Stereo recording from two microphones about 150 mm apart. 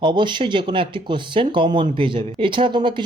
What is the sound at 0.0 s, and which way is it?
Speech, 30° right (ahead or behind).